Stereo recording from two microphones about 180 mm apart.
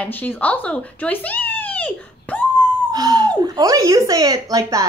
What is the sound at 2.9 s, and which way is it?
Speech, 20° right (ahead or behind).